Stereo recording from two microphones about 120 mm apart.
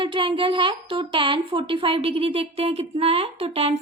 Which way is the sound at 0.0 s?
45° right (ahead or behind).